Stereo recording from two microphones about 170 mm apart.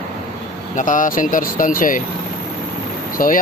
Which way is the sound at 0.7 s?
50° left (ahead or behind).